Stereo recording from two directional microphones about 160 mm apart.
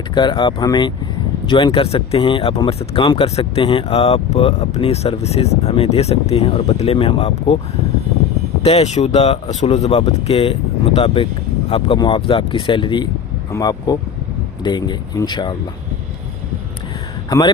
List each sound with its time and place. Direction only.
0.1 s speech: 30° left (ahead or behind)
8.6 s speech: 40° left (ahead or behind)
17.2 s a man's voice: 25° left (ahead or behind)